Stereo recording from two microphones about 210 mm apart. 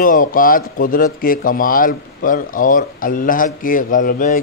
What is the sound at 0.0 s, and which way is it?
A man's voice, 40° left (ahead or behind).